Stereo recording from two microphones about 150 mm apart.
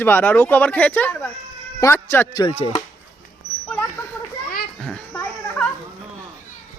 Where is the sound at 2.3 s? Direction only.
30° left (ahead or behind).